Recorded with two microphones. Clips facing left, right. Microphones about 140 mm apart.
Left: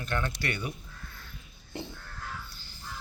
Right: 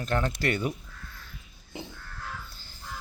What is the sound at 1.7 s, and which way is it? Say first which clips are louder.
Crow: left 1 dB; 5° right (ahead or behind).